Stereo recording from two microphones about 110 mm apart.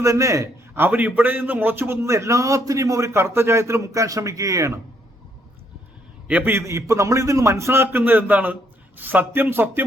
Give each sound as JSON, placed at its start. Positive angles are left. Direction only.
{"t": 0.0, "sound": "a man's voice", "side_deg": -30}
{"t": 6.2, "sound": "a man's voice", "side_deg": -15}